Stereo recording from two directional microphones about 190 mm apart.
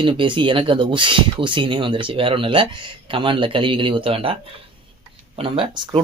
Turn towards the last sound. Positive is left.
turn(degrees=-25)  # may be behind; listen again after turning